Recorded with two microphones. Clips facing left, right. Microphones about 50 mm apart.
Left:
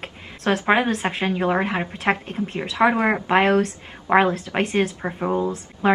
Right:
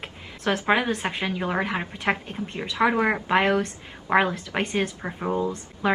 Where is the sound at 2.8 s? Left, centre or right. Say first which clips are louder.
Left 3 dB; left.